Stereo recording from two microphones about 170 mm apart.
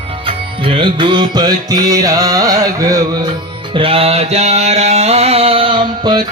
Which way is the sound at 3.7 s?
35° right (ahead or behind).